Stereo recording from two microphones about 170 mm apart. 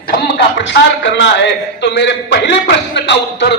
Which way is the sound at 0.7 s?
90° left.